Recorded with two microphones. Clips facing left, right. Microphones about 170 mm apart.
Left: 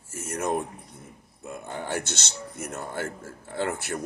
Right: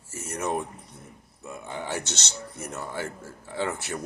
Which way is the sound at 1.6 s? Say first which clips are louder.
Left 1 dB; 50° left (ahead or behind).